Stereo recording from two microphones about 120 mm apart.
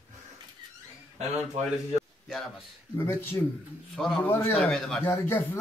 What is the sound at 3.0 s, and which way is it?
Speech, 20° left (ahead or behind).